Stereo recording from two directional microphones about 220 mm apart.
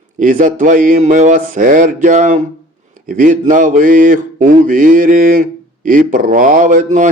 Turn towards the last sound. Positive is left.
turn(degrees=-35)  # may be behind; listen again after turning